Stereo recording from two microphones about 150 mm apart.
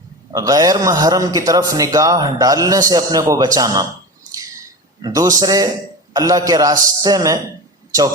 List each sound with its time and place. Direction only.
0.3 s a man's voice: 25° right (ahead or behind)
5.0 s a man's voice: 25° right (ahead or behind)